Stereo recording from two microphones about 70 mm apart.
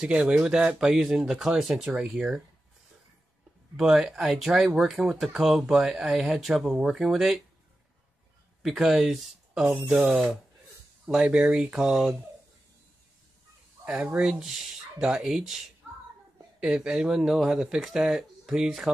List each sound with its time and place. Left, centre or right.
0.0 s speech: centre
3.7 s speech: centre
8.6 s speech: centre
11.1 s speech: centre
13.8 s speech: centre